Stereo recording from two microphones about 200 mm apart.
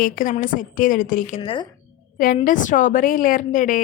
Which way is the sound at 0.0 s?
40° left (ahead or behind).